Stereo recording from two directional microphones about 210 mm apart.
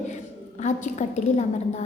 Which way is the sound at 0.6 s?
35° left (ahead or behind).